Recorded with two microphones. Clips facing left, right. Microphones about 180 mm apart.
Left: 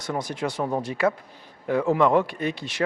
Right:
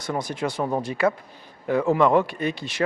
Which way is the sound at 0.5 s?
35° right (ahead or behind).